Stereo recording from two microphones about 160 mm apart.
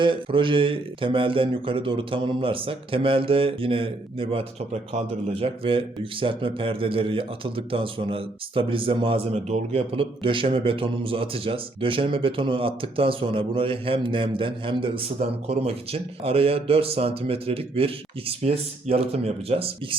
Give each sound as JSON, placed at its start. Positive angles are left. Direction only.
{"t": 0.0, "sound": "speech", "side_deg": -30}